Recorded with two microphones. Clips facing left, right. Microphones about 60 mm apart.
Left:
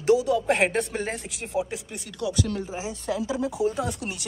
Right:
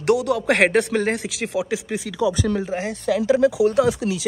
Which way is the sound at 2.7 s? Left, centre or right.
Right.